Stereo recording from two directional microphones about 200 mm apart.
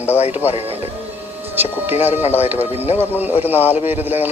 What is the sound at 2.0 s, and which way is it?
Speech, 10° right (ahead or behind).